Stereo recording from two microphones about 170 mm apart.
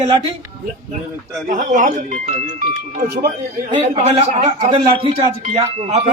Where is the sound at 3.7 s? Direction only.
35° right (ahead or behind).